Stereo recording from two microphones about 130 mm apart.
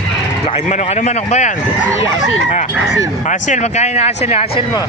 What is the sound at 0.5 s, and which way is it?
Speech, 60° left (ahead or behind).